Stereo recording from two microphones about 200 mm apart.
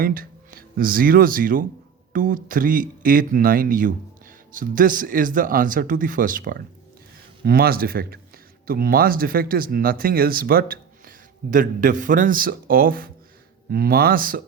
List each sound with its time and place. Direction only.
0.0 s speech: 45° right (ahead or behind)